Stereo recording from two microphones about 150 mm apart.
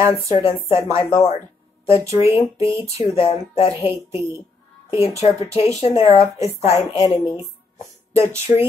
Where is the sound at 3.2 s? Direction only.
40° left (ahead or behind).